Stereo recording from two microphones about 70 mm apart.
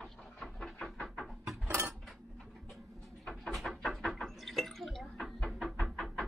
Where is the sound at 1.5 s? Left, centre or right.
Right.